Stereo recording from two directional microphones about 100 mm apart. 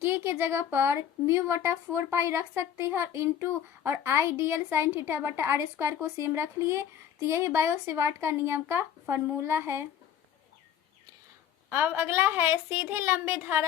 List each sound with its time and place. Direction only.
0.0 s a woman's voice: 25° right (ahead or behind)
11.7 s a woman's voice: 20° right (ahead or behind)